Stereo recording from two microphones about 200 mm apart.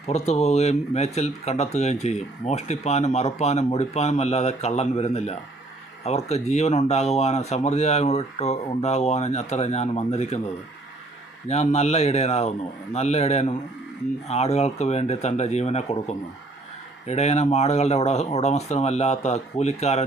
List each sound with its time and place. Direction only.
0.1 s speech: 35° left (ahead or behind)
11.4 s speech: 35° left (ahead or behind)